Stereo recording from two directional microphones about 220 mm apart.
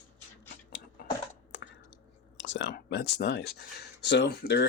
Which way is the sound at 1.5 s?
55° left (ahead or behind).